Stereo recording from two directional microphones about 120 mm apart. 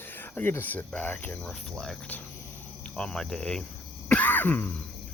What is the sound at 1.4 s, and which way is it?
Speech, 5° left (ahead or behind).